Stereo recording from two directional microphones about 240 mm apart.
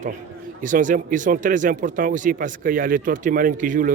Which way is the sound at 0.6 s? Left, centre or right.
Right.